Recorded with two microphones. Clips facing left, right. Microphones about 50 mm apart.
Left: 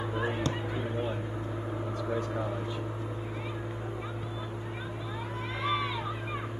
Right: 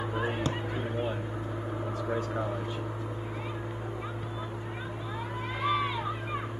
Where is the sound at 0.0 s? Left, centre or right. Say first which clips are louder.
Even; centre.